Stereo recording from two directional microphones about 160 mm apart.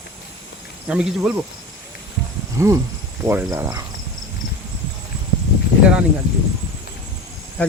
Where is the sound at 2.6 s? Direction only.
15° right (ahead or behind).